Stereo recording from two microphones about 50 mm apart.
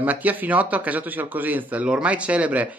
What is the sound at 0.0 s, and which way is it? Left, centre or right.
Speech, right.